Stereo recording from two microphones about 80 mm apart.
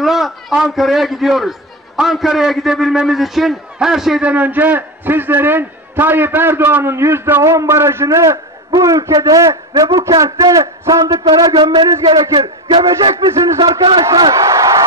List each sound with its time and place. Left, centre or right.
0.0 s a sound: centre
0.5 s a man's voice: centre
4.2 s a man's voice: centre; by 12.0 s right
12.4 s a man's voice: right
12.8 s a man's voice: right
14.3 s a sound: right